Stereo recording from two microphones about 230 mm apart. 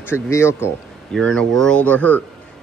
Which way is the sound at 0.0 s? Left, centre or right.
Centre.